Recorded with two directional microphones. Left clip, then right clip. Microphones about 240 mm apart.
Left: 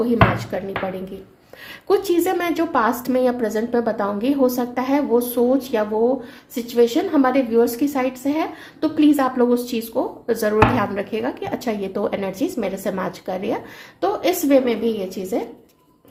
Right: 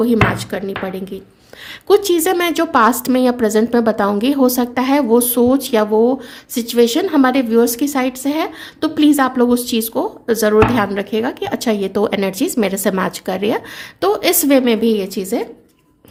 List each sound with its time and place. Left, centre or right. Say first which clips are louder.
0.0 s a woman's voice: right 3 dB; right
1.9 s a woman's voice: right 5 dB; right